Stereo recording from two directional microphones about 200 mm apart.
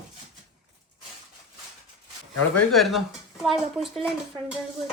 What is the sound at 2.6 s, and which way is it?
Speech, centre (ahead or behind).